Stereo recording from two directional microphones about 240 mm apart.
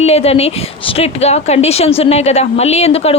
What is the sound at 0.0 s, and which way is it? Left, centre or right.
Speech, left.